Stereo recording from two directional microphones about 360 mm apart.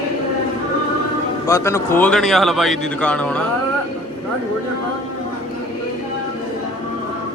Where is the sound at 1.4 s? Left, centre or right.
Centre.